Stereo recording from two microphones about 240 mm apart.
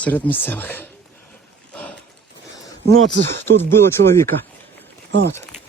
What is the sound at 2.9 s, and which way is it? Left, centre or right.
Speech, right.